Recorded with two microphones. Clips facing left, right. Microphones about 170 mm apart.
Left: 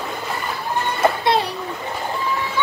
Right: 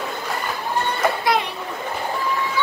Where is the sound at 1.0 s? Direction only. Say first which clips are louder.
Left 4 dB; 30° left (ahead or behind).